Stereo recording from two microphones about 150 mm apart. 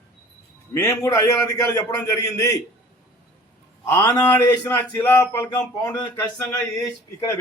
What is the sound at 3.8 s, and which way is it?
Speech, 15° left (ahead or behind).